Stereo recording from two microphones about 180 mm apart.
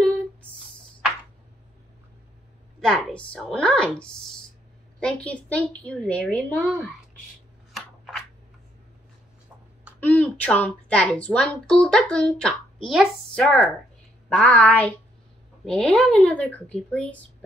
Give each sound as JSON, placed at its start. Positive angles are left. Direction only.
{"t": 2.8, "sound": "a woman's voice", "side_deg": 5}
{"t": 9.9, "sound": "a woman's voice", "side_deg": 10}